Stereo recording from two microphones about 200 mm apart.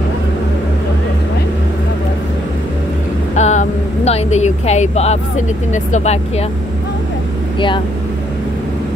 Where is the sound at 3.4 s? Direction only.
35° left (ahead or behind).